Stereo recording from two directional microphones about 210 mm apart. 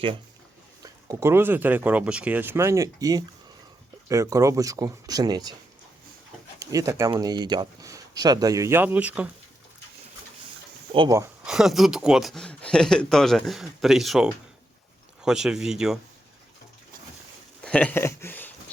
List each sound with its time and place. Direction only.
0.8 s speech: 15° right (ahead or behind)
6.6 s speech: 15° right (ahead or behind)
10.9 s speech: 20° right (ahead or behind)
11.4 s speech: centre (ahead or behind)
17.6 s a sound: 5° left (ahead or behind)